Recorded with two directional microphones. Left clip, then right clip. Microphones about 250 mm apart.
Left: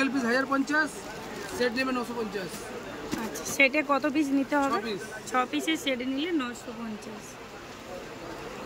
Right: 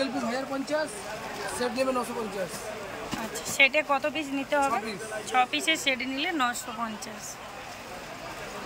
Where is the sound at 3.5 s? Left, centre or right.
Centre.